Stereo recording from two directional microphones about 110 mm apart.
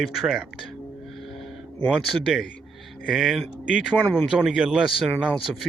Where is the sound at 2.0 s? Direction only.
Centre (ahead or behind).